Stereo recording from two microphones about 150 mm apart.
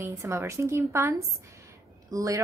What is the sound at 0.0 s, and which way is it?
A woman's voice, 20° right (ahead or behind).